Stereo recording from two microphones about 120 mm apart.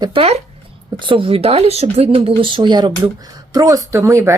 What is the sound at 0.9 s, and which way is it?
Speech, 45° right (ahead or behind).